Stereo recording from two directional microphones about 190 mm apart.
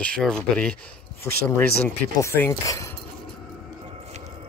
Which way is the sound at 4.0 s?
35° right (ahead or behind).